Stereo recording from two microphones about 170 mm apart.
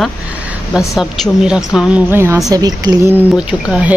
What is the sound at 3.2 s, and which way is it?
Speech, 5° right (ahead or behind).